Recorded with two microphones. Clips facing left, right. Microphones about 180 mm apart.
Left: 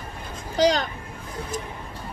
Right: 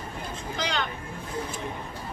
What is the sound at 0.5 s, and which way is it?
Speech, 40° left (ahead or behind).